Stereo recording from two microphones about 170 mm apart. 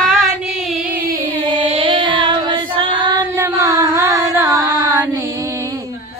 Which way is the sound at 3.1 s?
20° right (ahead or behind).